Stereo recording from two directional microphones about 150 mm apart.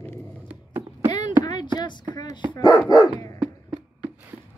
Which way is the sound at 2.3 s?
25° left (ahead or behind).